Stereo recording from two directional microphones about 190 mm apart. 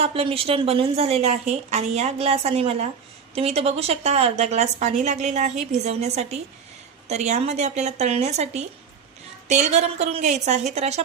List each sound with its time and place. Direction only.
0.0 s a woman's voice: 30° right (ahead or behind)